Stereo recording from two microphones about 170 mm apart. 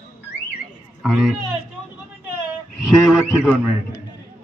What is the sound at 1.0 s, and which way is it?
Speech, centre (ahead or behind).